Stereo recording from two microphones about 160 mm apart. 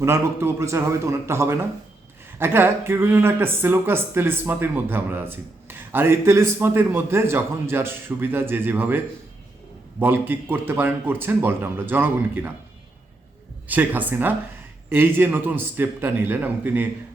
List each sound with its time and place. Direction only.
0.0 s speech: 15° right (ahead or behind)
13.7 s speech: 10° right (ahead or behind)